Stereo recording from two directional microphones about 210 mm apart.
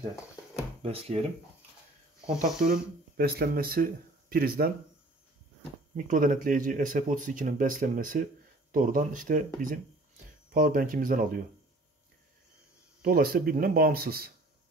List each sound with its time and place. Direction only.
0.8 s speech: 25° right (ahead or behind)
2.6 s speech: 45° right (ahead or behind)
5.9 s speech: 40° right (ahead or behind)
13.0 s speech: 45° right (ahead or behind)